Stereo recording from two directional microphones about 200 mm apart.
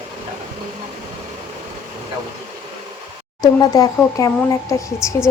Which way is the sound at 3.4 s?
20° left (ahead or behind).